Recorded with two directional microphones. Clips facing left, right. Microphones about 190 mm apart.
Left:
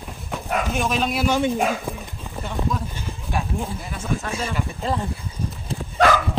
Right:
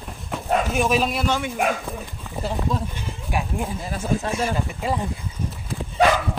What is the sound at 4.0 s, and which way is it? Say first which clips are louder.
Speech: right 3 dB; 35° right (ahead or behind).